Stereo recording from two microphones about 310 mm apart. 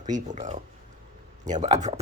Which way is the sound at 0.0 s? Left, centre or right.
Right.